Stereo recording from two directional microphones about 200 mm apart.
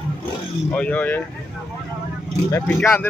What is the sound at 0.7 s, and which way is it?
Speech, 5° left (ahead or behind).